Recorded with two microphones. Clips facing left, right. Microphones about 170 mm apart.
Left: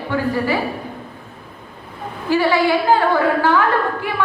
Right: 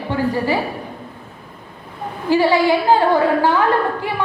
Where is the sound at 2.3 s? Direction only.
15° right (ahead or behind).